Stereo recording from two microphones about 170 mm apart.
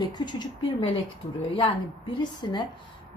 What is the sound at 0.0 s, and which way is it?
Speech, 25° left (ahead or behind).